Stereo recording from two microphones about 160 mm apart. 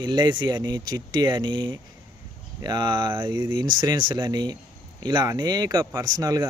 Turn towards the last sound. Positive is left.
turn(degrees=-25)  # may be behind; listen again after turning